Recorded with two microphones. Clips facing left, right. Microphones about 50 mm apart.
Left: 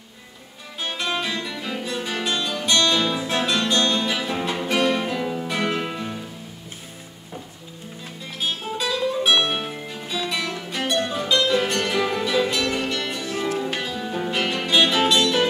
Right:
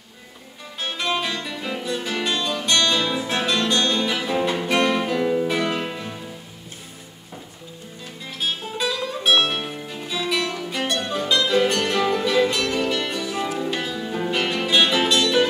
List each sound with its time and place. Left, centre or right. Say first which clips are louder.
0.9 s music: right 1 dB; centre
1.4 s music: right 1 dB; centre
1.8 s music: right 2 dB; centre
8.7 s music: left 5 dB; centre